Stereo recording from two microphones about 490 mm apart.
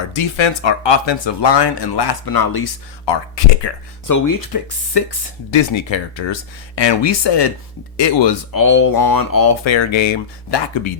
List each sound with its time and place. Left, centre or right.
0.1 s speech: left
3.1 s speech: left
4.0 s speech: left
5.5 s speech: left
8.5 s speech: left
9.6 s speech: left